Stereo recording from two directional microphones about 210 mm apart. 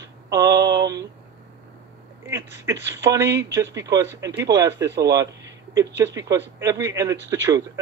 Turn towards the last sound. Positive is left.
turn(degrees=-15)  # may be behind; listen again after turning